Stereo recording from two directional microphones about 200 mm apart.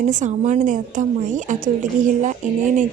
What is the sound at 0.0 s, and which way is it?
A woman's voice, 35° right (ahead or behind).